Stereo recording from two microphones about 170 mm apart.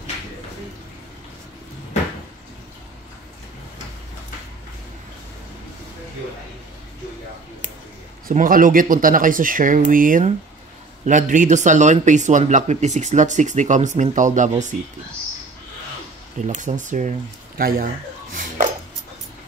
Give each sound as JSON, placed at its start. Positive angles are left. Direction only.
{"t": 8.3, "sound": "speech", "side_deg": -55}
{"t": 16.3, "sound": "speech", "side_deg": -45}
{"t": 18.3, "sound": "a sound", "side_deg": -50}